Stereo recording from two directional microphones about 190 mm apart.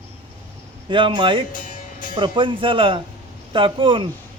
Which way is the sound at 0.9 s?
25° right (ahead or behind).